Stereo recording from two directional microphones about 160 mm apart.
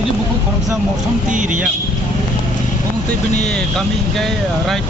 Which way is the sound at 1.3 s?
55° right (ahead or behind).